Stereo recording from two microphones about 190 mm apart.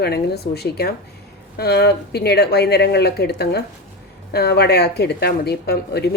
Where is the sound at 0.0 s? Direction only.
60° left (ahead or behind).